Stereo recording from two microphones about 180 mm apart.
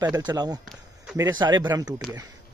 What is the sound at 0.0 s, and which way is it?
Speech, 25° right (ahead or behind).